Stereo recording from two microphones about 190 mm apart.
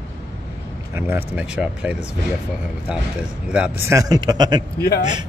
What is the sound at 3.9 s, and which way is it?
Speech, 20° right (ahead or behind).